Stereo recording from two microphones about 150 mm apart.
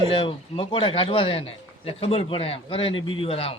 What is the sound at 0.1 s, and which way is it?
A man's voice, 35° left (ahead or behind).